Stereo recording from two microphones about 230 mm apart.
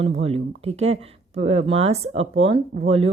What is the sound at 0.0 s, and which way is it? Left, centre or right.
Speech, right.